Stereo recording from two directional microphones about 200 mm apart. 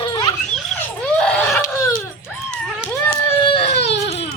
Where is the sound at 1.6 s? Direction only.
15° left (ahead or behind).